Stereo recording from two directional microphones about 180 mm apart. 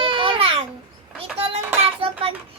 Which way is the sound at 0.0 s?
30° right (ahead or behind).